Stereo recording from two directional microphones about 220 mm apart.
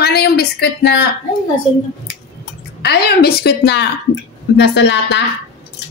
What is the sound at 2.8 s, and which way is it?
A woman's voice, 45° left (ahead or behind).